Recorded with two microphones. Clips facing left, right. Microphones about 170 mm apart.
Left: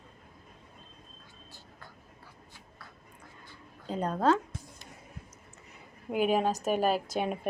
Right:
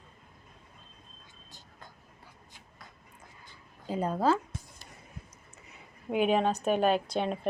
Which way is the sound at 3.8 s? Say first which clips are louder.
Even; 5° right (ahead or behind).